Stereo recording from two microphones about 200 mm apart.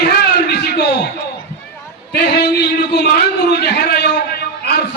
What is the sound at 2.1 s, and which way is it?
A man's voice, 55° left (ahead or behind).